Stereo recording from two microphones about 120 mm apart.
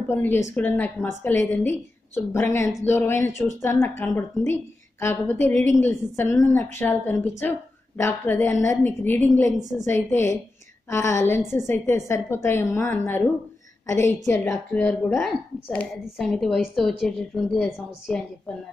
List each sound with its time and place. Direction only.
0.1 s a woman's voice: 20° left (ahead or behind)
16.2 s a woman's voice: 5° left (ahead or behind)